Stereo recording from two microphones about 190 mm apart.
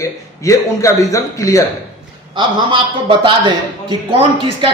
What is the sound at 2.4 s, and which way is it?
A man's voice, 25° right (ahead or behind).